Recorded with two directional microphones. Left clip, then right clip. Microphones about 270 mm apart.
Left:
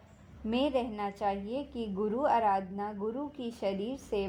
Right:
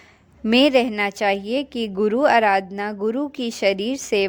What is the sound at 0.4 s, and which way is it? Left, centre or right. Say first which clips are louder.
A woman's voice: right 15 dB; right.